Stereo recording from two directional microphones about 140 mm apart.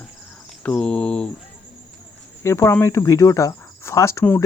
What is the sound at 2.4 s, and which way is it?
Speech, 20° left (ahead or behind).